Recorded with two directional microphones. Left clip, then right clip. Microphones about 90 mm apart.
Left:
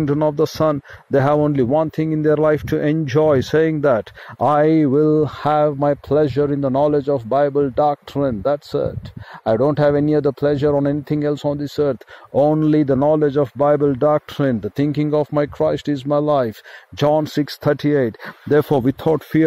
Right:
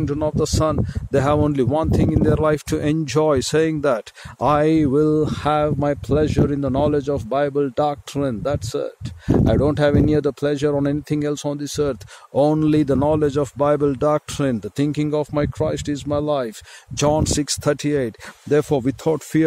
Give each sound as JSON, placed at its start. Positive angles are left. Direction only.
{"t": 0.0, "sound": "speech", "side_deg": 0}
{"t": 1.4, "sound": "speech", "side_deg": -30}
{"t": 17.5, "sound": "speech", "side_deg": -15}
{"t": 18.6, "sound": "speech", "side_deg": 15}
{"t": 19.3, "sound": "speech", "side_deg": -15}